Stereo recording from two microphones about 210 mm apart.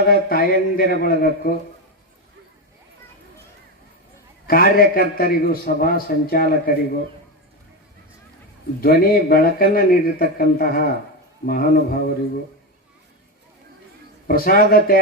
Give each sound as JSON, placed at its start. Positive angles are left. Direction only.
{"t": 0.1, "sound": "a man's voice", "side_deg": 45}
{"t": 4.4, "sound": "a man's voice", "side_deg": 45}
{"t": 8.8, "sound": "a man's voice", "side_deg": 45}
{"t": 14.3, "sound": "a man's voice", "side_deg": 45}